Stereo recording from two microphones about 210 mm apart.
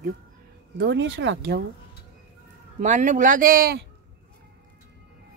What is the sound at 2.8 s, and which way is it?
Speech, 35° right (ahead or behind).